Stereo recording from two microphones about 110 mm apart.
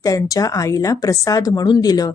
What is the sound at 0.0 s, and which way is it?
A woman's voice, 30° left (ahead or behind).